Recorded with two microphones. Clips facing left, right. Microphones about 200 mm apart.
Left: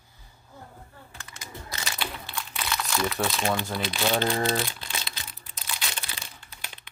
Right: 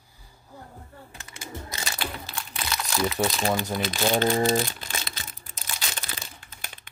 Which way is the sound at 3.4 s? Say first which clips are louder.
Right 2 dB; 15° right (ahead or behind).